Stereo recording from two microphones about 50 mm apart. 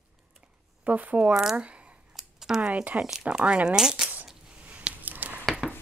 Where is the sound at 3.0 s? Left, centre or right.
Centre.